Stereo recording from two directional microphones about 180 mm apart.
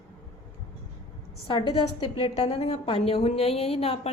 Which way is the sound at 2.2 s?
35° left (ahead or behind).